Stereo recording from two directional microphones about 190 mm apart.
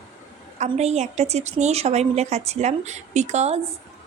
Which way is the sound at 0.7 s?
35° right (ahead or behind).